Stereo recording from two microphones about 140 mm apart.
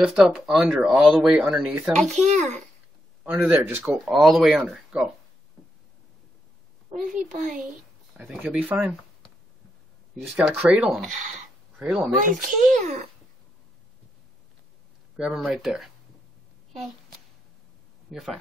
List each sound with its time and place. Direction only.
0.0 s speech: 5° right (ahead or behind)
2.0 s a child's voice: 55° right (ahead or behind)
3.3 s speech: 10° right (ahead or behind)
6.9 s a child's voice: 65° right (ahead or behind)
8.4 s speech: 10° right (ahead or behind)
10.3 s speech: 10° right (ahead or behind)
12.7 s a child's voice: 60° right (ahead or behind)
15.1 s speech: centre (ahead or behind)
18.1 s speech: centre (ahead or behind)